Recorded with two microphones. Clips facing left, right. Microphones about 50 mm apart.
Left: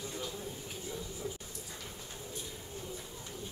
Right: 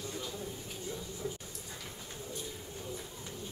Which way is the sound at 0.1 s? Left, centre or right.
Centre.